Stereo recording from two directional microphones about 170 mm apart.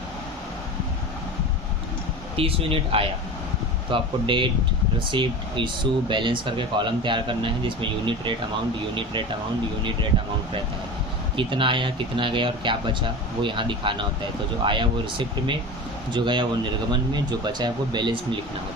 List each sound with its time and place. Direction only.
2.3 s speech: 35° right (ahead or behind)
11.3 s speech: 30° right (ahead or behind)